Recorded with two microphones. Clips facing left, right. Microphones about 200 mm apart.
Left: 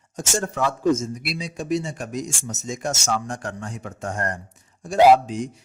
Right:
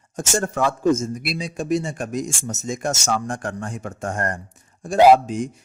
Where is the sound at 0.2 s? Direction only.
50° right (ahead or behind).